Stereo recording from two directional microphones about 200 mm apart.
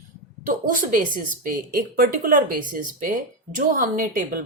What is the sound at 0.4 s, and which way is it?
A woman's voice, 40° right (ahead or behind).